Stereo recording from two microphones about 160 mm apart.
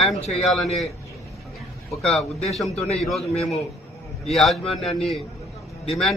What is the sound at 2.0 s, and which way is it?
A man's voice, 5° left (ahead or behind).